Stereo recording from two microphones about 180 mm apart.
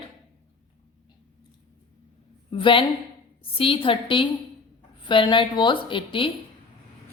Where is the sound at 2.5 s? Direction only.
30° left (ahead or behind).